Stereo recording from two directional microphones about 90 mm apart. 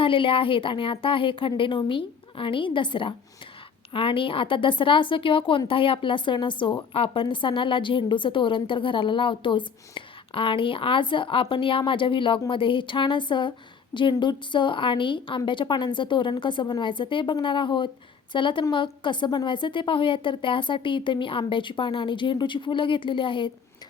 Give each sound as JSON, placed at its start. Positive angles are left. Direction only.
{"t": 0.0, "sound": "speech", "side_deg": 75}
{"t": 3.9, "sound": "a woman's voice", "side_deg": 75}